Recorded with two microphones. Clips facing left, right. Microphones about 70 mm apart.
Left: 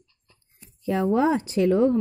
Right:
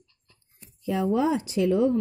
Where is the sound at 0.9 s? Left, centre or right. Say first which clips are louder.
Left 3 dB; left.